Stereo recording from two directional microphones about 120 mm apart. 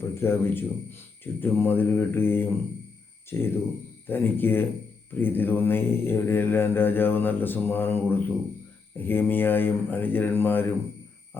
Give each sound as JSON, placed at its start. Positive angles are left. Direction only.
{"t": 0.0, "sound": "speech", "side_deg": 20}
{"t": 1.2, "sound": "mantra", "side_deg": 20}
{"t": 3.2, "sound": "speech", "side_deg": 20}
{"t": 4.0, "sound": "mantra", "side_deg": 15}